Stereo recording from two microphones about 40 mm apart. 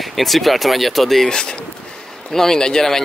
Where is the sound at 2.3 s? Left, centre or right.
Centre.